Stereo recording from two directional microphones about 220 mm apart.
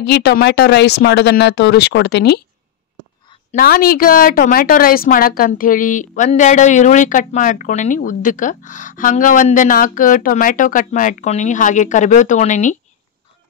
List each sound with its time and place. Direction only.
0.0 s speech: 50° left (ahead or behind)
3.5 s a woman's voice: 45° left (ahead or behind)